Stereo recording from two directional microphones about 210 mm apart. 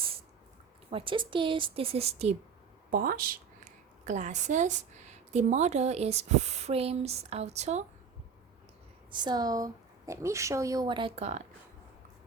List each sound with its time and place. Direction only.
0.9 s a woman's voice: 25° right (ahead or behind)
2.9 s speech: 40° right (ahead or behind)
9.1 s speech: 20° right (ahead or behind)